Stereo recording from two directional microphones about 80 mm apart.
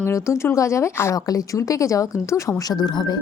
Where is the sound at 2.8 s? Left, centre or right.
Left.